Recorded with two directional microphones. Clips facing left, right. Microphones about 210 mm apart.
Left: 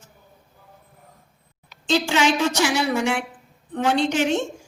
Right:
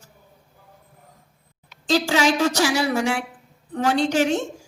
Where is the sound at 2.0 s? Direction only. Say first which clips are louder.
Right 1 dB; 40° right (ahead or behind).